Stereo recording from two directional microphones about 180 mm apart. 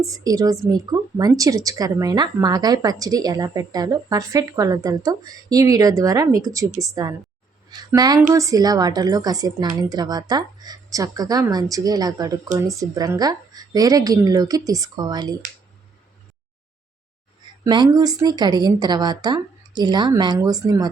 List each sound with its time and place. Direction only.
0.0 s a woman's voice: 20° right (ahead or behind)
17.6 s a woman's voice: 20° right (ahead or behind)